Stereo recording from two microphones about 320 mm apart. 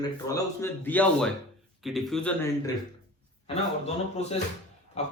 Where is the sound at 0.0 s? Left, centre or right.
Centre.